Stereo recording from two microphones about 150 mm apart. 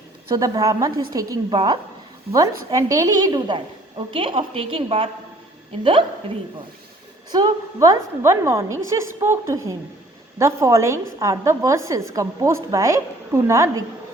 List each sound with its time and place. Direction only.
0.3 s a woman's voice: 25° right (ahead or behind)
7.3 s a woman's voice: 25° right (ahead or behind)